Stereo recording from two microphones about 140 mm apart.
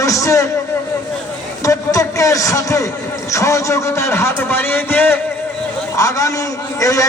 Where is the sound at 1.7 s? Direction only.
25° left (ahead or behind).